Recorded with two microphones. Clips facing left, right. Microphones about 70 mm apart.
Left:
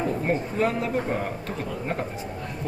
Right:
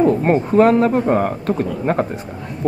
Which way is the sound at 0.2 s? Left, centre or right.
Right.